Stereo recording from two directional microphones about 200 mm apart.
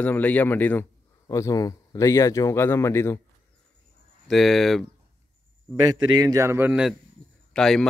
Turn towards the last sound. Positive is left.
turn(degrees=0)  # may be behind; listen again after turning